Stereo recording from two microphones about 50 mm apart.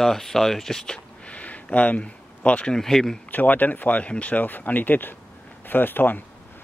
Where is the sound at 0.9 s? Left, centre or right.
Left.